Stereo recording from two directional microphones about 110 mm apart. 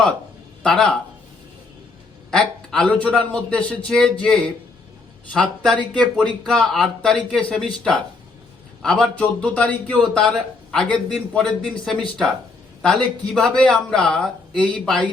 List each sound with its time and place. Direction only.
0.6 s speech: 5° left (ahead or behind)
2.3 s speech: 5° left (ahead or behind)